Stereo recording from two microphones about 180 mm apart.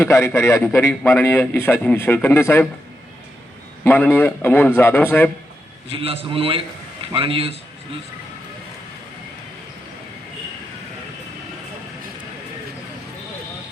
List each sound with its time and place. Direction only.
0.0 s a man's voice: 15° left (ahead or behind)
3.8 s a man's voice: 10° left (ahead or behind)
5.9 s a man's voice: 30° right (ahead or behind)